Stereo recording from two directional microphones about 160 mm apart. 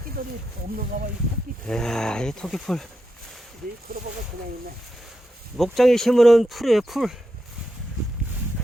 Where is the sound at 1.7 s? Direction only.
5° left (ahead or behind).